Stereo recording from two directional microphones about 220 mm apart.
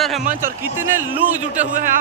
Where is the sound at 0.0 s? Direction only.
Centre (ahead or behind).